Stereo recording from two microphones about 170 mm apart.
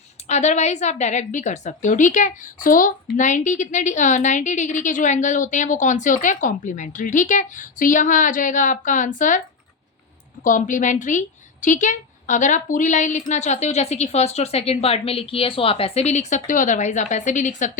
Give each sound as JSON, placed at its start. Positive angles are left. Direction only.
{"t": 0.3, "sound": "a woman's voice", "side_deg": 40}
{"t": 10.4, "sound": "a woman's voice", "side_deg": 50}